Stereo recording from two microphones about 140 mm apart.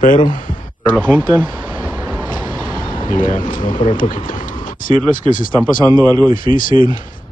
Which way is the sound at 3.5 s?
75° left (ahead or behind).